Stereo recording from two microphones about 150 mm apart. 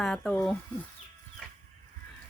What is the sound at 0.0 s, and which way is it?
Speech, 5° left (ahead or behind).